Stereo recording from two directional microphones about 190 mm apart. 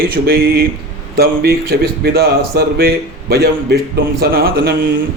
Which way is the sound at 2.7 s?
55° right (ahead or behind).